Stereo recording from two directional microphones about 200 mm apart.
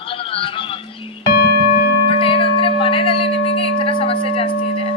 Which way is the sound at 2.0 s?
25° left (ahead or behind).